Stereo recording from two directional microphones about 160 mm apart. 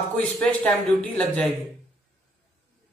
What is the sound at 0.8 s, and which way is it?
Speech, 5° left (ahead or behind).